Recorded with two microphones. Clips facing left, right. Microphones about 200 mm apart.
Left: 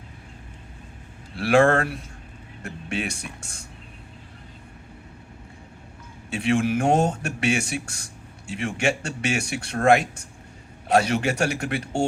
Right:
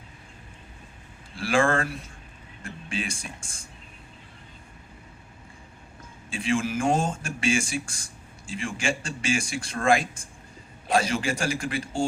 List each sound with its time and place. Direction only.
1.4 s speech: 65° left (ahead or behind)
6.3 s speech: 65° left (ahead or behind)